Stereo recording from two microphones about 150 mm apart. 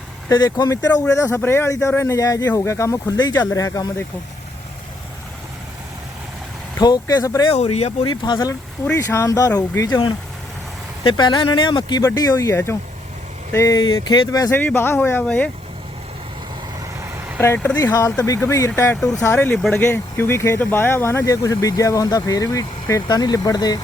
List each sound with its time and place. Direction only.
0.3 s speech: 25° left (ahead or behind)
6.7 s speech: 25° left (ahead or behind)
7.5 s speech: 45° left (ahead or behind)
8.0 s speech: 30° left (ahead or behind); by 15.4 s 10° left (ahead or behind)
17.4 s speech: 15° left (ahead or behind)